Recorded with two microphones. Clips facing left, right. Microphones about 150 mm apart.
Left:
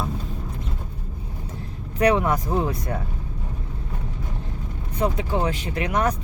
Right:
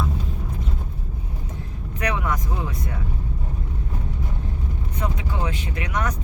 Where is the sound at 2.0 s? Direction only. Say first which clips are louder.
Left 7 dB; 35° left (ahead or behind).